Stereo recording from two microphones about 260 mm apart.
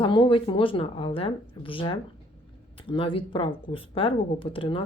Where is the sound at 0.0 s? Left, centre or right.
Centre.